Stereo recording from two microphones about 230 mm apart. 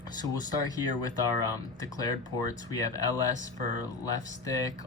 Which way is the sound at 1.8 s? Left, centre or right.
Centre.